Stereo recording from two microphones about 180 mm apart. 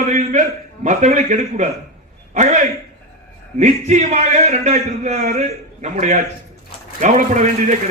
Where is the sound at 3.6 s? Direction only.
40° right (ahead or behind).